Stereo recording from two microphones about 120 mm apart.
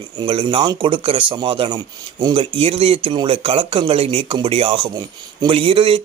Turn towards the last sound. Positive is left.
turn(degrees=-50)  # may be behind; listen again after turning